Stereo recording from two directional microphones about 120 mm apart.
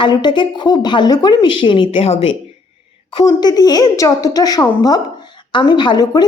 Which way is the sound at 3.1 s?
35° left (ahead or behind).